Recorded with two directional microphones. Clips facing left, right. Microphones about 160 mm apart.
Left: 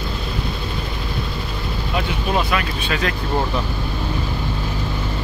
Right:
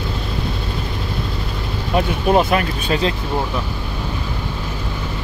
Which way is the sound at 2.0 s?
45° right (ahead or behind).